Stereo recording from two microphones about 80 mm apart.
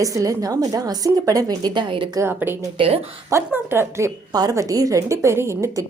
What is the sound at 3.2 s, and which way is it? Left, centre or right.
Speech, right.